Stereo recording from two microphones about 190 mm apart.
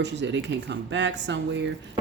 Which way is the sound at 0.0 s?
70° right (ahead or behind).